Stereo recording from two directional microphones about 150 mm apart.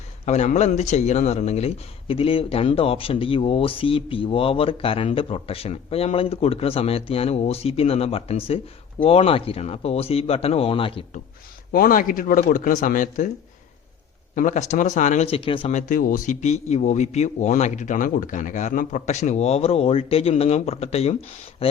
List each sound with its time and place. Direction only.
0.3 s speech: 50° left (ahead or behind)
11.7 s speech: 70° left (ahead or behind)
14.3 s a man's voice: 55° left (ahead or behind); by 15.7 s 35° left (ahead or behind)
15.7 s a man's voice: 60° left (ahead or behind); by 21.8 s 40° left (ahead or behind)